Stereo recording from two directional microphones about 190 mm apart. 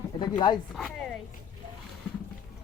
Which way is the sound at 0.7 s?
5° left (ahead or behind).